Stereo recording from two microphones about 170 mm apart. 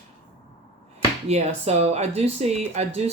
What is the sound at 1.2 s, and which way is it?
Speech, 40° right (ahead or behind).